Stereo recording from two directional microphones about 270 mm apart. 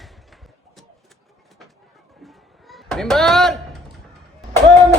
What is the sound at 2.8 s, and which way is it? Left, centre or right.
Speech, centre.